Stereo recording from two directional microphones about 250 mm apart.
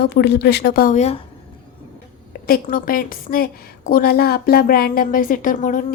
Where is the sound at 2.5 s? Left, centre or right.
Left.